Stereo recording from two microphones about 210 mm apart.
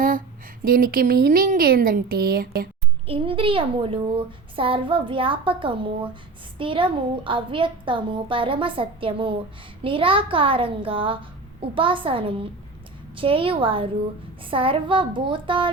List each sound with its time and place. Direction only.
0.6 s speech: 45° right (ahead or behind)
3.1 s a child's voice: 25° right (ahead or behind)